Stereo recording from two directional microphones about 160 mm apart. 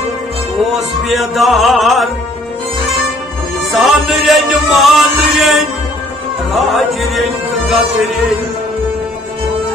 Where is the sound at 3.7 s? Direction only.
Centre (ahead or behind).